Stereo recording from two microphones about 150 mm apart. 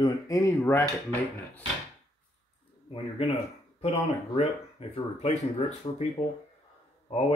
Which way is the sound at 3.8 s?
40° left (ahead or behind).